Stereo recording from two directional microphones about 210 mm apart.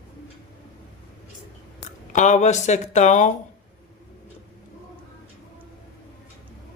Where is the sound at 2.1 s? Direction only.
35° left (ahead or behind).